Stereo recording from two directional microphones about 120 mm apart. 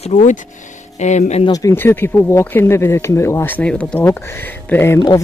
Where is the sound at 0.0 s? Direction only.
80° left.